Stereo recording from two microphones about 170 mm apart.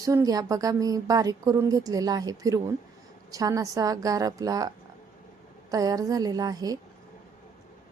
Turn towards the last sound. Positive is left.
turn(degrees=-20)  # may be behind; listen again after turning